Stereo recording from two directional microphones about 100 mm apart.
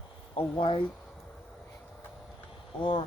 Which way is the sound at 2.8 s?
50° left (ahead or behind).